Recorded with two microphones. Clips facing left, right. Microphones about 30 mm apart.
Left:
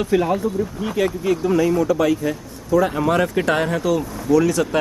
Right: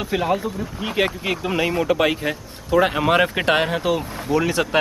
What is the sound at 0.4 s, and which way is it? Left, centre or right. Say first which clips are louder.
Speech: left 4 dB; right.